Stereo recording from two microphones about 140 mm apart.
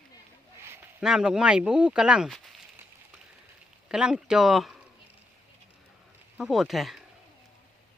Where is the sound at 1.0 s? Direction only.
5° right (ahead or behind).